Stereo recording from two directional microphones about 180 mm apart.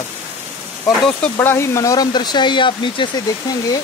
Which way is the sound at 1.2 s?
10° left (ahead or behind).